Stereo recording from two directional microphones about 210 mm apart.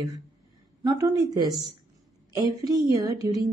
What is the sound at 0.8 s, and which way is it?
A woman's voice, 15° right (ahead or behind).